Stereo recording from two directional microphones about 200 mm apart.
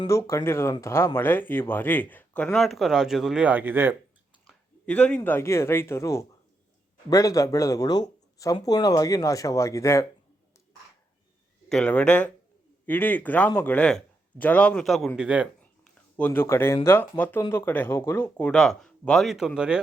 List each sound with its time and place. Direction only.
0.0 s speech: 15° left (ahead or behind); by 3.9 s 10° right (ahead or behind)
4.4 s speech: 5° left (ahead or behind)
11.7 s speech: 5° left (ahead or behind)
16.1 s speech: 10° left (ahead or behind)